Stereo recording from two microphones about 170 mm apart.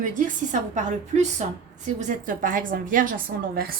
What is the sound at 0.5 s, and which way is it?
A woman's voice, 45° right (ahead or behind).